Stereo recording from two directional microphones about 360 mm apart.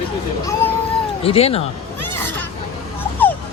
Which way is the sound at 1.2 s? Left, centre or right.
Centre.